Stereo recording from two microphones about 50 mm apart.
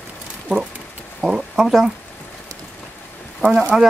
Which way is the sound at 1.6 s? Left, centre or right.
Centre.